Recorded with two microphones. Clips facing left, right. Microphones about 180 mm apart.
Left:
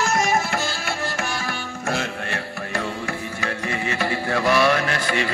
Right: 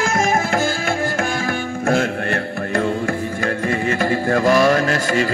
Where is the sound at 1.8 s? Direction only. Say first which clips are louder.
Right 8 dB; 55° right (ahead or behind).